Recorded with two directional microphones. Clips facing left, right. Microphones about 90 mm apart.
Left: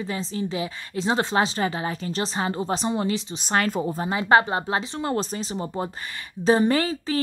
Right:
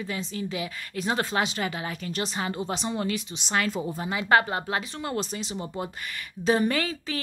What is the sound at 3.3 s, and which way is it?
Speech, 45° left (ahead or behind).